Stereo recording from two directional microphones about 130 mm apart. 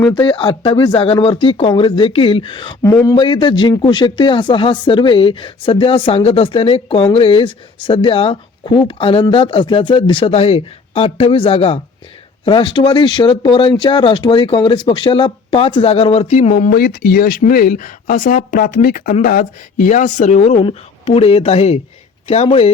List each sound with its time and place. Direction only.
0.0 s speech: 40° left (ahead or behind)
2.8 s a man's voice: 25° left (ahead or behind)
3.2 s speech: 40° left (ahead or behind)